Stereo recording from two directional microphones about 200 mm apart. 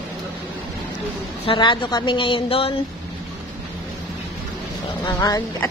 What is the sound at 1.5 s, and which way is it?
A woman's voice, 25° left (ahead or behind).